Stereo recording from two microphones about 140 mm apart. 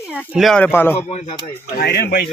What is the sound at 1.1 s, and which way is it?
Speech, 45° left (ahead or behind).